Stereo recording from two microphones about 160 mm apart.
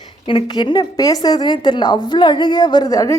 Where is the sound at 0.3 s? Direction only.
30° left (ahead or behind).